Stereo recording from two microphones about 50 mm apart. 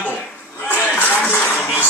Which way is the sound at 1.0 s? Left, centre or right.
Left.